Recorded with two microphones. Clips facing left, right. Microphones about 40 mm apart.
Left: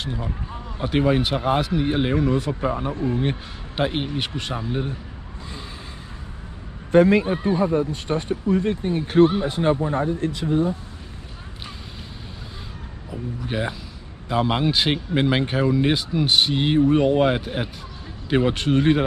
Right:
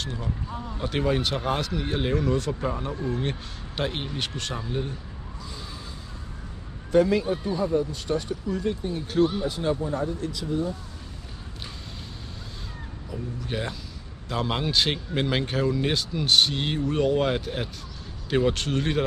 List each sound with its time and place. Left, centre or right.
0.0 s speech: centre
3.2 s speech: centre
6.9 s speech: left
13.1 s speech: centre